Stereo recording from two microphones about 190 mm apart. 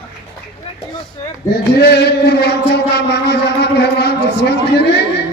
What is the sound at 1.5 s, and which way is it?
A man's voice, 60° left (ahead or behind).